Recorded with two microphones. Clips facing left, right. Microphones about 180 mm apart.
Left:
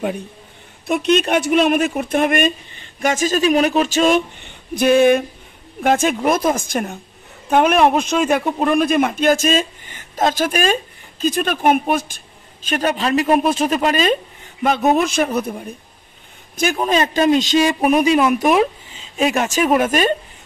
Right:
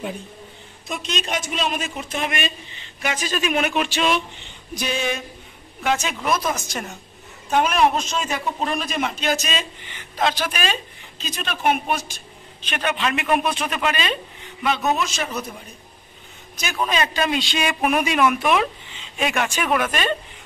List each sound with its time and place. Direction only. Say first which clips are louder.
0.8 s a man's voice: left 12 dB; 60° left (ahead or behind)
12.6 s a man's voice: left 5 dB; 40° left (ahead or behind)
16.8 s a man's voice: left 5 dB; 45° left (ahead or behind)